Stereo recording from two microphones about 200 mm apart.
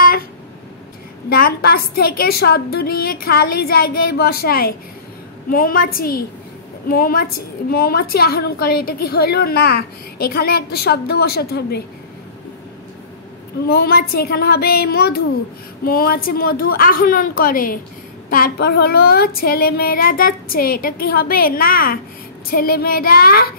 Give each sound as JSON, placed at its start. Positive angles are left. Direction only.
{"t": 1.3, "sound": "a woman's voice", "side_deg": 50}
{"t": 13.7, "sound": "a woman's voice", "side_deg": 50}